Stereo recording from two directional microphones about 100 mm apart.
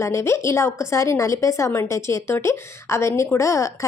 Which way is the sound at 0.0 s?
30° left (ahead or behind).